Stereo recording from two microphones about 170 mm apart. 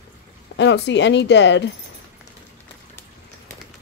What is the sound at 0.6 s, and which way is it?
Speech, 90° left.